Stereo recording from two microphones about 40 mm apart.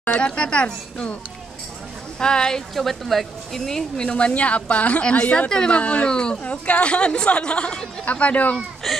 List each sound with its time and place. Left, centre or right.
0.2 s a woman's voice: left
2.1 s a woman's voice: centre
2.7 s speech: centre
4.0 s speech: left
5.5 s a woman's voice: centre
5.8 s a woman's voice: left
6.4 s a woman's voice: left
8.0 s speech: left
8.8 s speech: centre